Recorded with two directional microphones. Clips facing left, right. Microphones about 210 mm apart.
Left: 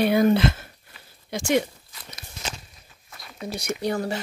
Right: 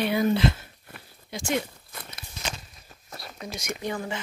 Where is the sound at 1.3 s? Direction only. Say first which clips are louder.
Left 6 dB; 85° left.